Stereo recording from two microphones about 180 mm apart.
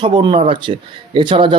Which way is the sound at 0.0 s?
30° right (ahead or behind).